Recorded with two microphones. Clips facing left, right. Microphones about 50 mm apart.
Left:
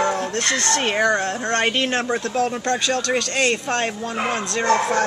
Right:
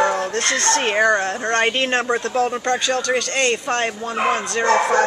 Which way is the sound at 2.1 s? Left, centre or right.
Centre.